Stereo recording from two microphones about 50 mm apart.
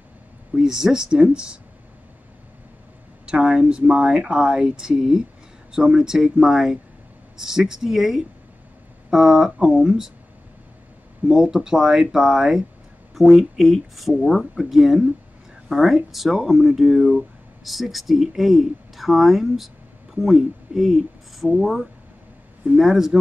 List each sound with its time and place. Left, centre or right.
0.6 s speech: centre
3.3 s speech: centre
9.7 s speech: centre
11.2 s speech: centre
22.8 s speech: centre